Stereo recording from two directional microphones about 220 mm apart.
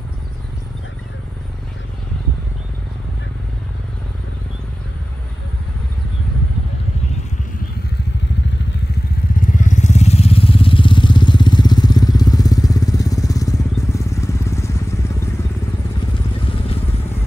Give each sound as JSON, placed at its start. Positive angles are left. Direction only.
{"t": 9.4, "sound": "vehicle", "side_deg": 35}